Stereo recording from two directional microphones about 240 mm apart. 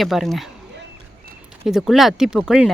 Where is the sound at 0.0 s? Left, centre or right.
Centre.